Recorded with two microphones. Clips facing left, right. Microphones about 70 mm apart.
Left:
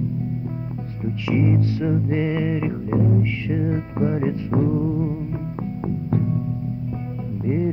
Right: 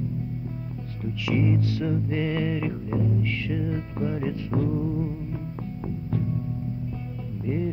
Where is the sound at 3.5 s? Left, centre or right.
Left.